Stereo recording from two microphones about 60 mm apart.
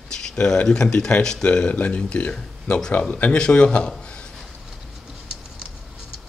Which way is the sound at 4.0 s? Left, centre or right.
Centre.